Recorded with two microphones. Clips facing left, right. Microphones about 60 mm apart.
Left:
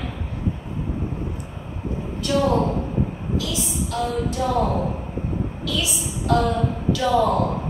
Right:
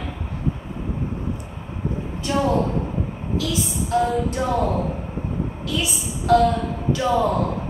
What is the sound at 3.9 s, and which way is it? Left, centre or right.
Music, right.